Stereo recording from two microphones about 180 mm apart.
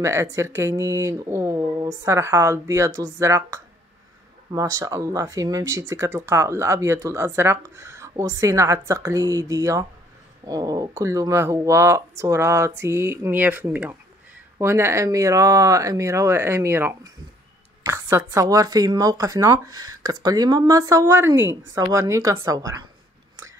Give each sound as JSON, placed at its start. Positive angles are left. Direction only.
{"t": 0.0, "sound": "speech", "side_deg": -15}